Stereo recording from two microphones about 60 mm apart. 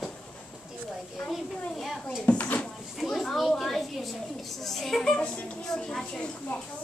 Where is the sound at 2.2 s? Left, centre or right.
Left.